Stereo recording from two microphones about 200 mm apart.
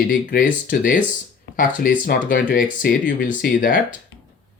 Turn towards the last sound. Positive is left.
turn(degrees=45)  # may be behind; listen again after turning